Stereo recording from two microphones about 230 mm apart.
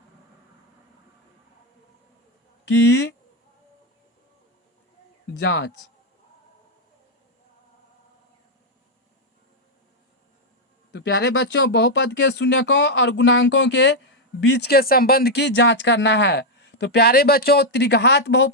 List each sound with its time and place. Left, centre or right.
2.6 s speech: left
5.4 s speech: left
10.9 s speech: left